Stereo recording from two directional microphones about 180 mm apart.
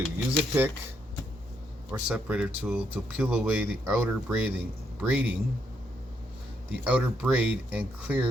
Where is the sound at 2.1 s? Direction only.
5° right (ahead or behind).